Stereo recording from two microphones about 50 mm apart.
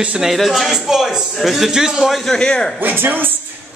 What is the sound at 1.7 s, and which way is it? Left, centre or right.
Speech, centre.